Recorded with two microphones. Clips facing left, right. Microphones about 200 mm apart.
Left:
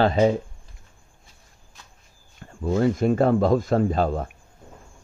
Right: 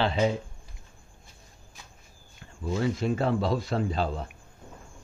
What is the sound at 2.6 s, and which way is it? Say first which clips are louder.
Speech: left 7 dB; 50° left (ahead or behind).